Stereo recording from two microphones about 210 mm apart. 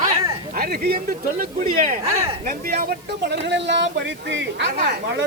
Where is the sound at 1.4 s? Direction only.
40° right (ahead or behind).